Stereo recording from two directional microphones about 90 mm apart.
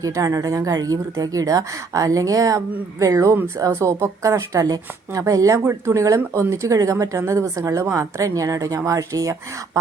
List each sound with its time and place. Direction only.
0.0 s a woman's voice: 40° right (ahead or behind)